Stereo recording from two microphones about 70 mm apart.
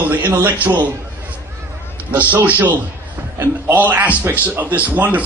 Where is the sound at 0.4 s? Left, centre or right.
Right.